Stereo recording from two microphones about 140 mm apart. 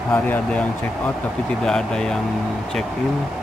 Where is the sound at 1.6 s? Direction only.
5° left (ahead or behind).